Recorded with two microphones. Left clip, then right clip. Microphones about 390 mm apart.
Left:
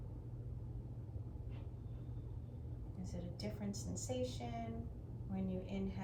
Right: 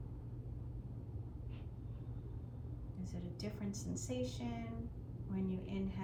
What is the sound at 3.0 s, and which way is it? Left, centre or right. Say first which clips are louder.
A woman's voice: even; centre.